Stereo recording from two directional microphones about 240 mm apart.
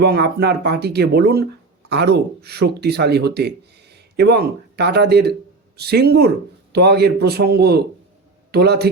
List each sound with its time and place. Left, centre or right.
0.0 s a man's voice: right